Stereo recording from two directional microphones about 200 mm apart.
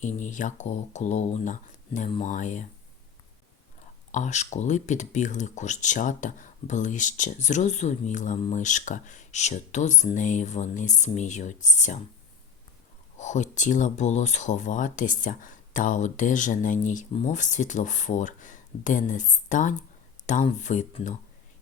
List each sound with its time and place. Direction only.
0.0 s speech: 40° left (ahead or behind)
4.1 s speech: 35° left (ahead or behind)
13.1 s speech: 35° left (ahead or behind)